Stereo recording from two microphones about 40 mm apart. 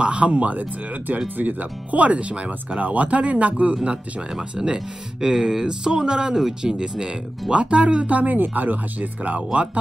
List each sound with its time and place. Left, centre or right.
0.0 s speech: right
3.7 s speech: right